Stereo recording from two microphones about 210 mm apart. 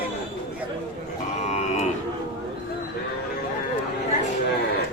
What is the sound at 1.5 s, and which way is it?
Livestock, 30° left (ahead or behind).